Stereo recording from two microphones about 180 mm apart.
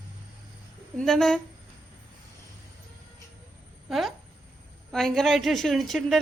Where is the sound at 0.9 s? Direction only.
Centre (ahead or behind).